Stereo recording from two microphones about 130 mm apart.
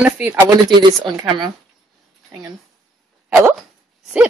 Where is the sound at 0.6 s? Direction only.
35° right (ahead or behind).